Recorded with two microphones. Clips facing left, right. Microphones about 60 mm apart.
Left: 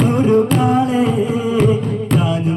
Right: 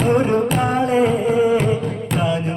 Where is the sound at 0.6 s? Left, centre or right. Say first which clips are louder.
Left 2 dB; right.